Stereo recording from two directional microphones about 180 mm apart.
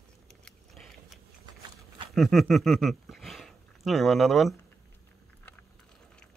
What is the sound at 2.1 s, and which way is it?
Speech, centre (ahead or behind).